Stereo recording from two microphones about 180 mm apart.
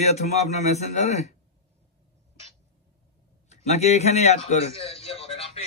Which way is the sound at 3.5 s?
40° left (ahead or behind).